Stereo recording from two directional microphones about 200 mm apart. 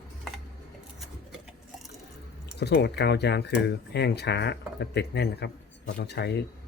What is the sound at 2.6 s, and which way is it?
Speech, 55° left (ahead or behind).